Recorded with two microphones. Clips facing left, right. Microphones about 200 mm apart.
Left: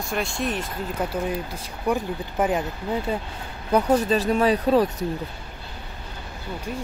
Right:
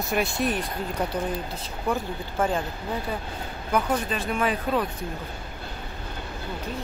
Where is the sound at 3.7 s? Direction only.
35° left (ahead or behind).